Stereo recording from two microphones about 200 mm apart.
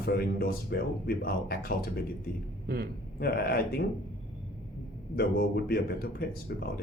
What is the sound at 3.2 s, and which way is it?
Speech, 50° left (ahead or behind).